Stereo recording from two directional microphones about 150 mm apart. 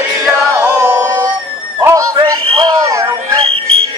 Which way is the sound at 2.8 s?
20° right (ahead or behind).